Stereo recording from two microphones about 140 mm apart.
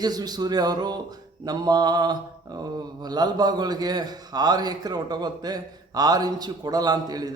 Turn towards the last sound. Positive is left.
turn(degrees=-30)  # may be behind; listen again after turning